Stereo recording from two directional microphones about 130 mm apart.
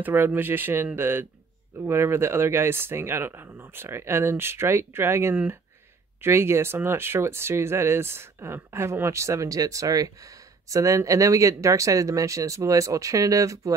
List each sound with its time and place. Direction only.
0.0 s speech: 15° right (ahead or behind)